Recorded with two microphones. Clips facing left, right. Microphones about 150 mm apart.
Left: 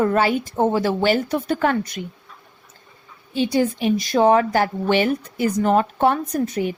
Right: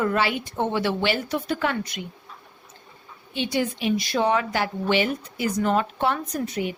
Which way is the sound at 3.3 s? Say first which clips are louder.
Left 6 dB; 35° left (ahead or behind).